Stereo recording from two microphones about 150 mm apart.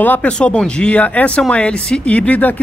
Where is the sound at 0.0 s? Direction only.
10° left (ahead or behind).